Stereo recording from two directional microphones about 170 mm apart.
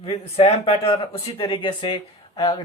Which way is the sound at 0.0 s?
35° left (ahead or behind).